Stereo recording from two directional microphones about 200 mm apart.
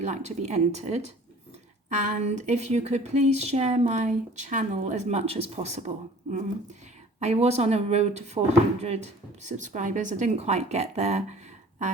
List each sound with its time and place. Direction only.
0.0 s speech: 35° right (ahead or behind)
7.2 s speech: 35° right (ahead or behind)